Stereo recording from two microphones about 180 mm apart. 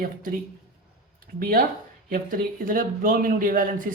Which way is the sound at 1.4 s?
55° right (ahead or behind).